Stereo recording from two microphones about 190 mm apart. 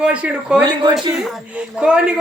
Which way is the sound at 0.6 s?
20° right (ahead or behind).